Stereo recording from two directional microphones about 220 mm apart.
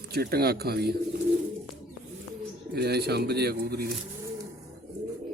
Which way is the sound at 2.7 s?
45° right (ahead or behind).